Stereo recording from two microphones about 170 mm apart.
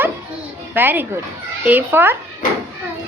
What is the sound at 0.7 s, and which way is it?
A child's voice, 10° right (ahead or behind).